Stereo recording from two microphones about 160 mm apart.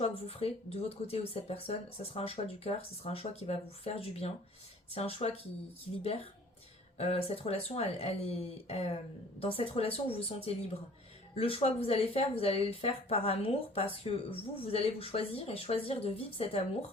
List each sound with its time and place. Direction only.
0.0 s speech: 40° left (ahead or behind)
7.0 s speech: 40° left (ahead or behind)